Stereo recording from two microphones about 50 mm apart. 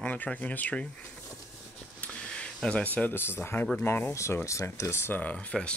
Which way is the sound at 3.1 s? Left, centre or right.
Left.